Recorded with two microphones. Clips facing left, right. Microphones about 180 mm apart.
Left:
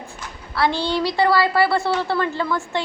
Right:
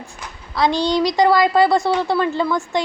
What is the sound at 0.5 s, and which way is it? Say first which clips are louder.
A woman's voice: right 3 dB; 15° right (ahead or behind).